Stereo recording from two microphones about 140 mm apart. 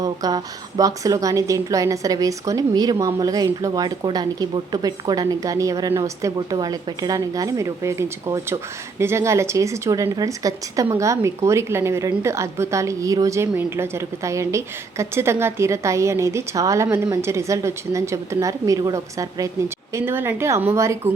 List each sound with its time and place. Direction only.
0.0 s speech: 25° right (ahead or behind)